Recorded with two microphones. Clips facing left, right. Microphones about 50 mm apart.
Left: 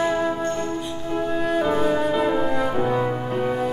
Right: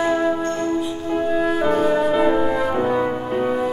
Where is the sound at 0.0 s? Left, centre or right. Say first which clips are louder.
Right 3 dB; centre.